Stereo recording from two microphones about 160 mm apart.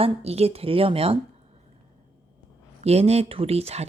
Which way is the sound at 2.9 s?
40° right (ahead or behind).